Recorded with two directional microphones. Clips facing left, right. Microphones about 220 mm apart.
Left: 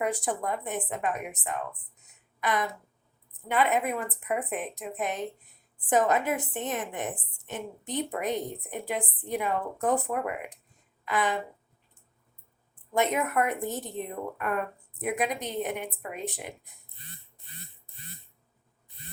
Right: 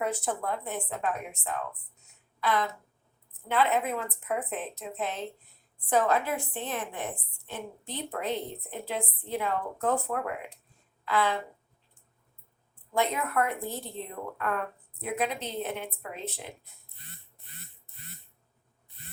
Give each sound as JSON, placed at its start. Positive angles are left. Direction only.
{"t": 0.0, "sound": "a woman's voice", "side_deg": 15}
{"t": 2.4, "sound": "a sound", "side_deg": 20}
{"t": 3.5, "sound": "a woman's voice", "side_deg": 15}
{"t": 12.9, "sound": "a woman's voice", "side_deg": 20}